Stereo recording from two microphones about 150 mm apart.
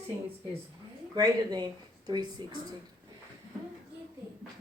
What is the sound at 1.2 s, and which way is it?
A woman's voice, 25° right (ahead or behind).